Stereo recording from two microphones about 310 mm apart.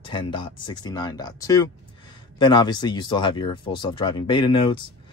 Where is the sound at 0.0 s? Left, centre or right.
Centre.